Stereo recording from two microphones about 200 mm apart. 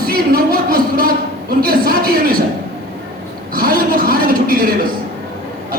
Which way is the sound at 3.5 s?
45° right (ahead or behind).